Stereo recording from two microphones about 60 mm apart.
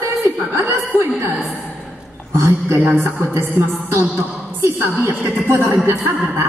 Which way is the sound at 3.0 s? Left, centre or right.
Right.